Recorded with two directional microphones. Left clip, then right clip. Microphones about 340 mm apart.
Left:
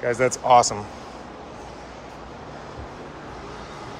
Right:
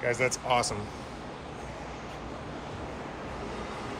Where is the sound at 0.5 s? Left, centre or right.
Left.